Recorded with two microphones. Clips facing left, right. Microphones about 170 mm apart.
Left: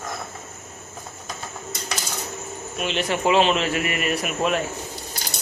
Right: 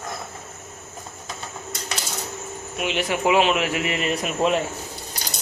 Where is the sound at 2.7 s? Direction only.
15° right (ahead or behind).